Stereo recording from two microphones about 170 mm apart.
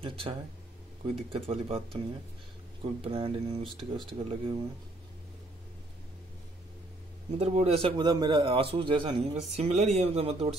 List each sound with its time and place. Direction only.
0.0 s a man's voice: 35° right (ahead or behind)
7.3 s a man's voice: 35° right (ahead or behind)